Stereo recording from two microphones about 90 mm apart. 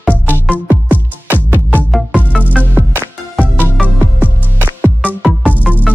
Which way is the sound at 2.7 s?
20° right (ahead or behind).